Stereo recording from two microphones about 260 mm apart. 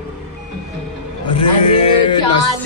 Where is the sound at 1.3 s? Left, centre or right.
Left.